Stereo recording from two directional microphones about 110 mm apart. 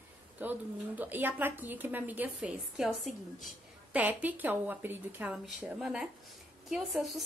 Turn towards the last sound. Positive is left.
turn(degrees=0)  # may be behind; listen again after turning